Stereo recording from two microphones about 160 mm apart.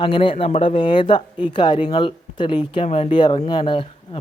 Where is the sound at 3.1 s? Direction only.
30° left (ahead or behind).